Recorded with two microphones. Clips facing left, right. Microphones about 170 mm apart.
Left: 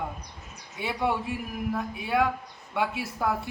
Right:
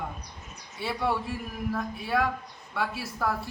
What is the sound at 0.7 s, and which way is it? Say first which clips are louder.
A man's voice: left 1 dB; 15° left (ahead or behind).